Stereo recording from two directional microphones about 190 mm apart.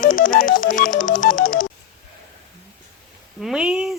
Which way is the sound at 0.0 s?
45° left (ahead or behind).